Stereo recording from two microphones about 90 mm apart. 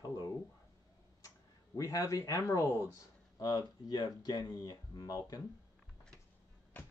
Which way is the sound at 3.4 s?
50° left (ahead or behind).